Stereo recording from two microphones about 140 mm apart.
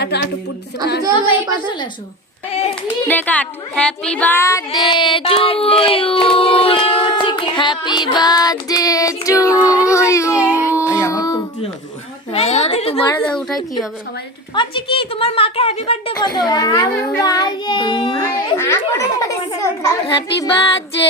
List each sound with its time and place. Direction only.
3.1 s speech: 10° left (ahead or behind)
4.7 s child singing: 35° left (ahead or behind)
9.8 s a sound: 20° left (ahead or behind)
10.4 s baby cry: 20° left (ahead or behind)
11.0 s a sound: 25° left (ahead or behind)
12.3 s a sound: 50° left (ahead or behind)
13.1 s speech: 5° left (ahead or behind)
14.5 s a woman's voice: 35° left (ahead or behind)
16.1 s a child's voice: 30° left (ahead or behind)
18.5 s a child's voice: 20° left (ahead or behind)